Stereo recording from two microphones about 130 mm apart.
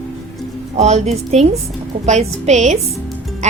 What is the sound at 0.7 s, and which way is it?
A woman's voice, 55° right (ahead or behind).